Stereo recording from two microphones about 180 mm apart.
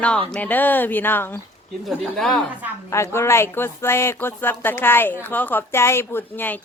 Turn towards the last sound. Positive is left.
turn(degrees=10)  # may be behind; listen again after turning